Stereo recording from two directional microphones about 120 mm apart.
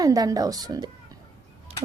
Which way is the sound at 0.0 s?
30° right (ahead or behind).